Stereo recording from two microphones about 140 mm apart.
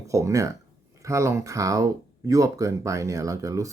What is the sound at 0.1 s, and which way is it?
Speech, 20° right (ahead or behind).